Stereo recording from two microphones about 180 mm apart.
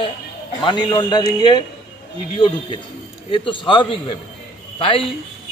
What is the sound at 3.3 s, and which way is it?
Speech, 30° left (ahead or behind).